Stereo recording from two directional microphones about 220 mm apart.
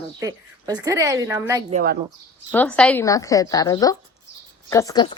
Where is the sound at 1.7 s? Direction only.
35° right (ahead or behind).